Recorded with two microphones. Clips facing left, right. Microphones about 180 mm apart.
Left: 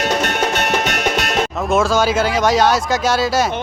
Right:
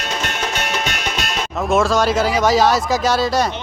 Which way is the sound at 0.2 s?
65° left (ahead or behind).